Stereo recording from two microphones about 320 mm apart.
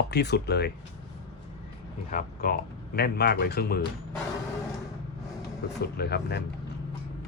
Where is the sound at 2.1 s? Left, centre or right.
Left.